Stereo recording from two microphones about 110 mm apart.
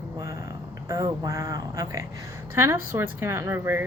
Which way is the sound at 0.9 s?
30° right (ahead or behind).